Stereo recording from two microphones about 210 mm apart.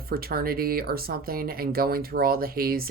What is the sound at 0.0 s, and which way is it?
Speech, 45° right (ahead or behind).